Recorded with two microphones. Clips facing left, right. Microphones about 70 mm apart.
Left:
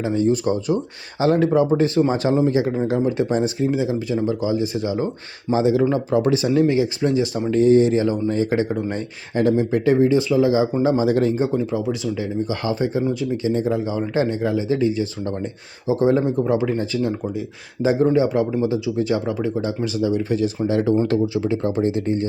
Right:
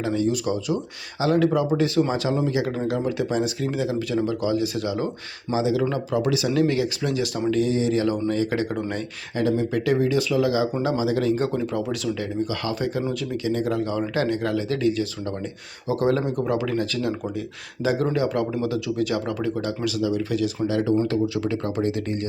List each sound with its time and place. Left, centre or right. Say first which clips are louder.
0.1 s speech: left 4 dB; left
3.7 s speech: left 3 dB; left
5.5 s speech: left 5 dB; left
6.5 s speech: left 4 dB; left
7.5 s speech: left 9 dB; left
7.9 s speech: left 3 dB; left
9.4 s speech: left 4 dB; left
9.8 s speech: left 6 dB; left
10.8 s speech: left 4 dB; left
11.3 s speech: left 3 dB; centre